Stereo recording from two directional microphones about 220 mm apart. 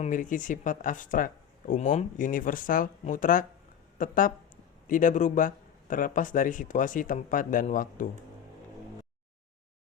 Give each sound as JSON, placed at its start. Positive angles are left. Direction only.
{"t": 0.0, "sound": "speech", "side_deg": 35}